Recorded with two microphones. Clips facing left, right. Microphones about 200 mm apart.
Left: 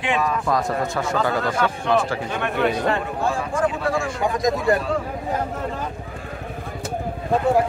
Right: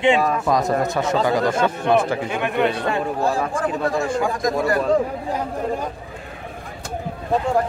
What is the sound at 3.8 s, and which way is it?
Speech, 45° right (ahead or behind).